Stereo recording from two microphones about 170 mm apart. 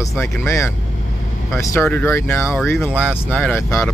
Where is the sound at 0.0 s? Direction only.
15° left (ahead or behind).